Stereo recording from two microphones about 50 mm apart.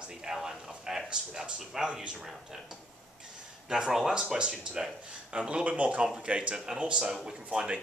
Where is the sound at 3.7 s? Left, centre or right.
Centre.